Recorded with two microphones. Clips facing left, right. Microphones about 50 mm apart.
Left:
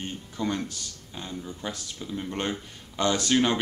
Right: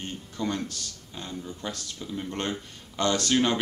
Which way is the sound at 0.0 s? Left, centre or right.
Centre.